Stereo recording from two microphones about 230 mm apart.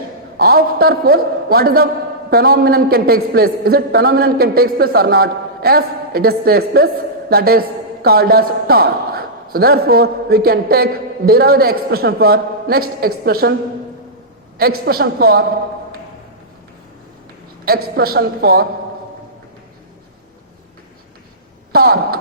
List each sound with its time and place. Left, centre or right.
0.3 s a man's voice: right
14.8 s a man's voice: right
17.8 s a man's voice: right
21.7 s a man's voice: right